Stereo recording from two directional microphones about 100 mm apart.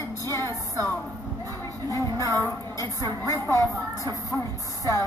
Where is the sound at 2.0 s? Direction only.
30° left (ahead or behind).